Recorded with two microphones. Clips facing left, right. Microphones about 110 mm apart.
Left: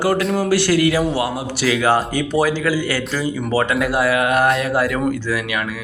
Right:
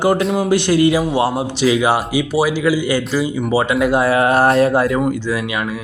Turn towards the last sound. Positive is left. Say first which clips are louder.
# right 2 dB
turn(degrees=-25)  # may be behind; listen again after turning